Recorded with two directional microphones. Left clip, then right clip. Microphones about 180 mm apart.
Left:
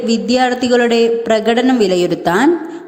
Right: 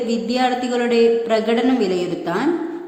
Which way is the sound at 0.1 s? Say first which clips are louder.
Left 7 dB; 35° left (ahead or behind).